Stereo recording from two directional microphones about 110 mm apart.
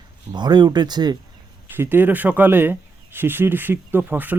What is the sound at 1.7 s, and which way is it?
Speech, 20° right (ahead or behind).